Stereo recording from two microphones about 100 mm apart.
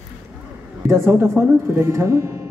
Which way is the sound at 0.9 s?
25° right (ahead or behind).